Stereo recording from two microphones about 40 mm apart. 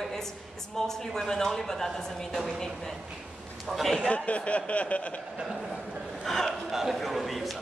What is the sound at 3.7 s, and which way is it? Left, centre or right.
Speech, centre.